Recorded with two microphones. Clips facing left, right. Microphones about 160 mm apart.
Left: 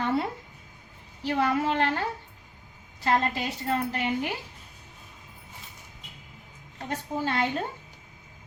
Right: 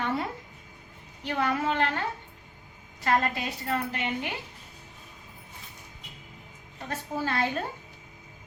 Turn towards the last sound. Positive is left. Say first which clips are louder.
# left 1 dB
turn(degrees=20)  # may be behind; listen again after turning